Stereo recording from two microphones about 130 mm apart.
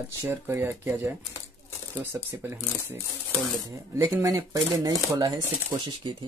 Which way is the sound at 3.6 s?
25° right (ahead or behind).